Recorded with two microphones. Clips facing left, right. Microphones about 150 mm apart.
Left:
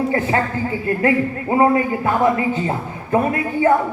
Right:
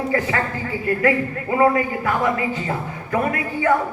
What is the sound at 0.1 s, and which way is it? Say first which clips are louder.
A man's voice: left 3 dB; 30° left (ahead or behind).